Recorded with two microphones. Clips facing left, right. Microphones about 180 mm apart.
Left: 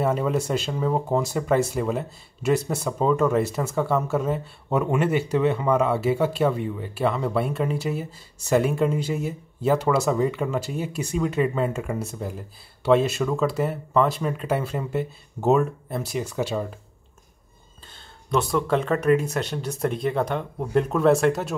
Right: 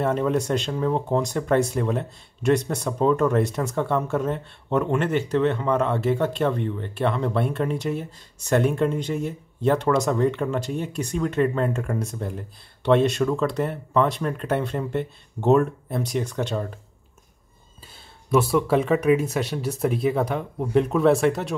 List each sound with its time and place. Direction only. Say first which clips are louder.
0.0 s speech: right 1 dB; 5° left (ahead or behind)
17.9 s speech: right 3 dB; 5° right (ahead or behind)